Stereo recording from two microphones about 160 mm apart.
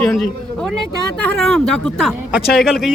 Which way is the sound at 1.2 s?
5° left (ahead or behind).